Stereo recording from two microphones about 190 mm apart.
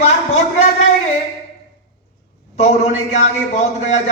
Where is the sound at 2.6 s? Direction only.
35° left (ahead or behind).